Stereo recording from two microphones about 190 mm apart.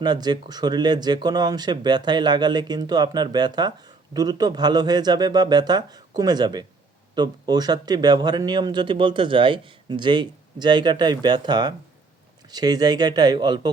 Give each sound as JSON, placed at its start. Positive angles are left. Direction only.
{"t": 0.0, "sound": "speech", "side_deg": -20}